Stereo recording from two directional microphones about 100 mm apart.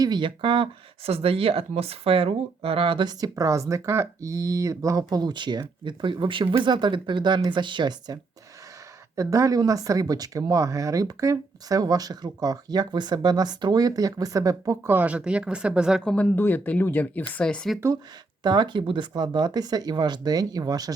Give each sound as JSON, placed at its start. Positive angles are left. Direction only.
{"t": 0.0, "sound": "speech", "side_deg": -50}
{"t": 9.1, "sound": "speech", "side_deg": -35}
{"t": 14.8, "sound": "speech", "side_deg": -15}
{"t": 16.0, "sound": "speech", "side_deg": 10}
{"t": 16.3, "sound": "speech", "side_deg": 20}
{"t": 18.4, "sound": "speech", "side_deg": -45}